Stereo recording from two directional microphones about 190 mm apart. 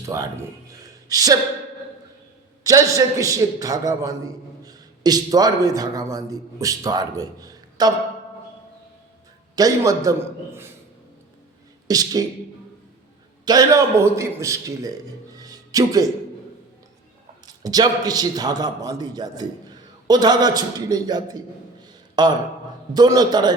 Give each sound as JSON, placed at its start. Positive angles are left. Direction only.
{"t": 0.0, "sound": "a man's voice", "side_deg": -15}
{"t": 0.7, "sound": "a sound", "side_deg": -20}
{"t": 2.6, "sound": "a man's voice", "side_deg": -15}
{"t": 9.6, "sound": "a man's voice", "side_deg": -20}
{"t": 11.9, "sound": "a man's voice", "side_deg": -20}
{"t": 13.4, "sound": "a man's voice", "side_deg": -20}
{"t": 15.4, "sound": "music", "side_deg": -20}
{"t": 17.4, "sound": "a man's voice", "side_deg": -20}